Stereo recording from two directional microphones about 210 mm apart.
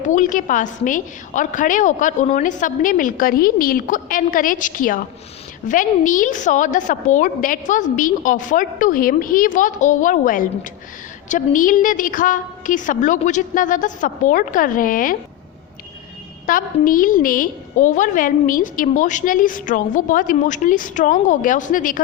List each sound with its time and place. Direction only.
0.0 s a woman's voice: 40° left (ahead or behind)
16.5 s a woman's voice: 40° left (ahead or behind)